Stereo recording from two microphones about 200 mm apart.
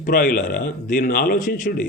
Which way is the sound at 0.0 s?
45° left (ahead or behind).